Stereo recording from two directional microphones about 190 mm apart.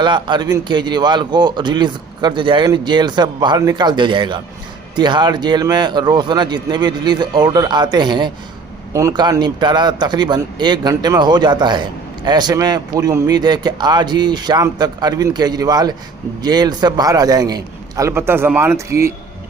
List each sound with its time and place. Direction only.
0.0 s a man's voice: 25° right (ahead or behind)